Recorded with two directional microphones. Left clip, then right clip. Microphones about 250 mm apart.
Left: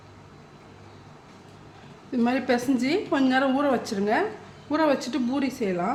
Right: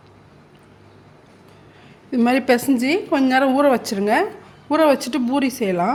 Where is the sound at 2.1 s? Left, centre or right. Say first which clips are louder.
Right 7 dB; right.